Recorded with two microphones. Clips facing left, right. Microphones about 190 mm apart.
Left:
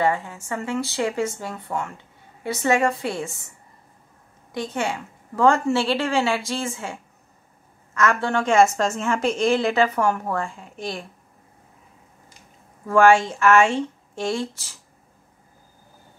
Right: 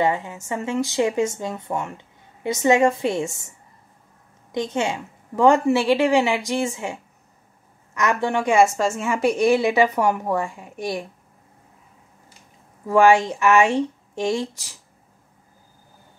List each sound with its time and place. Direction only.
0.0 s speech: 20° right (ahead or behind)
4.5 s a woman's voice: 20° right (ahead or behind)
12.8 s a woman's voice: 15° right (ahead or behind)